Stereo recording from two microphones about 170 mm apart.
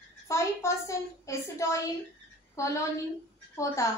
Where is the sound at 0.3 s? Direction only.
15° left (ahead or behind).